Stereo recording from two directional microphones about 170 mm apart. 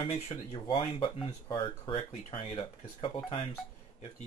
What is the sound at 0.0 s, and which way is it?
Speech, 35° left (ahead or behind).